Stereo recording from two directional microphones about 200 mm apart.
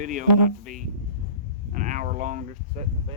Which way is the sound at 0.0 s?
40° right (ahead or behind).